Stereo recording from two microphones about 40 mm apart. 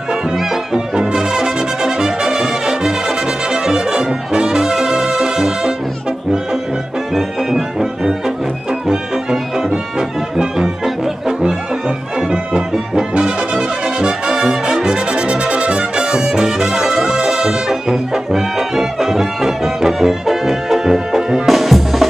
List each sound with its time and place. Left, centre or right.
0.7 s music: centre
3.5 s brass instrument: centre
7.2 s brass instrument: centre
8.8 s music: centre
12.2 s music: centre
14.3 s brass instrument: centre
21.5 s music: centre